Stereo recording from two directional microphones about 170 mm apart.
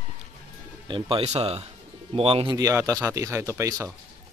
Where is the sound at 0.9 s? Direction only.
30° right (ahead or behind).